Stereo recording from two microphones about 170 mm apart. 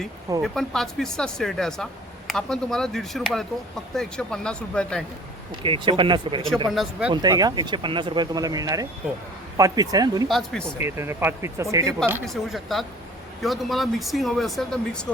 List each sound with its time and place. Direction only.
0.4 s speech: centre (ahead or behind)
5.6 s speech: 30° right (ahead or behind)
6.7 s speech: centre (ahead or behind)
7.1 s speech: 25° right (ahead or behind)
10.2 s speech: centre (ahead or behind)
10.6 s speech: 15° right (ahead or behind)
12.2 s speech: centre (ahead or behind)